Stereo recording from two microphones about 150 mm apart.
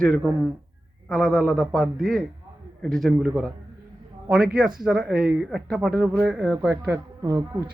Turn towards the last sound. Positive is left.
turn(degrees=-20)  # may be behind; listen again after turning